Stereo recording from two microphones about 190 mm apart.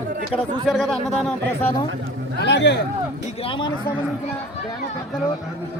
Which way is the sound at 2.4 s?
65° left (ahead or behind).